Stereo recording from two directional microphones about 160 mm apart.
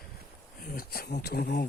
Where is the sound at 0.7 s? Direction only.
75° left (ahead or behind).